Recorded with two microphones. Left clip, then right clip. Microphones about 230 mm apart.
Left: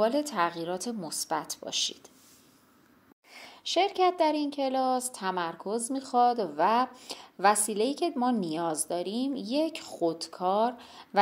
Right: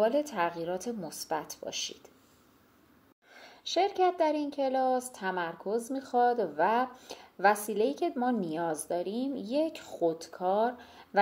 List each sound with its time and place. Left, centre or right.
0.0 s a woman's voice: left
3.4 s a woman's voice: left